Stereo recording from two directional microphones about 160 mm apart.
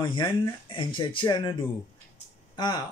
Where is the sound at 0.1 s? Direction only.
30° left (ahead or behind).